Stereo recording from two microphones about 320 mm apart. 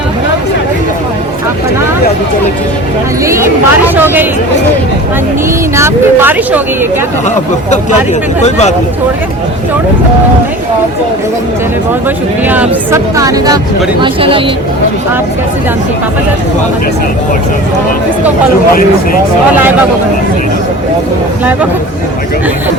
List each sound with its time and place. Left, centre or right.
3.2 s speech: centre
5.7 s speech: centre
8.4 s speech: left
12.5 s speech: centre